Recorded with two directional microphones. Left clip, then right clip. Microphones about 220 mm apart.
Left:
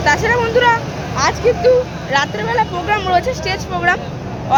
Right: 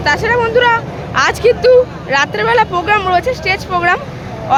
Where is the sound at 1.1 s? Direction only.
20° right (ahead or behind).